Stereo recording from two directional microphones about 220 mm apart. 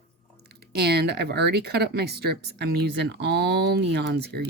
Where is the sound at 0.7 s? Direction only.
45° right (ahead or behind).